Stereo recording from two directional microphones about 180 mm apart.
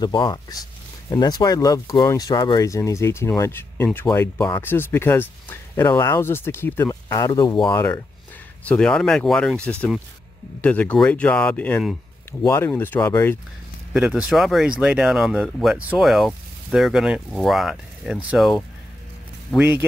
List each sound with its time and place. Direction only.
0.0 s speech: 25° left (ahead or behind)
7.7 s speech: 10° left (ahead or behind)
13.9 s speech: 5° right (ahead or behind)